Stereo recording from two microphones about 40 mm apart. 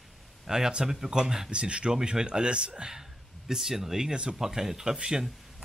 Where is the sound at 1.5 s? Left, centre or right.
Right.